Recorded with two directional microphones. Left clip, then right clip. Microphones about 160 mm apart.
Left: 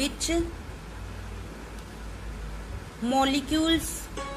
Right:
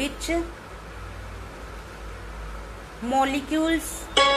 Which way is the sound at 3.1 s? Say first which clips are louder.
Right 2 dB; 15° left (ahead or behind).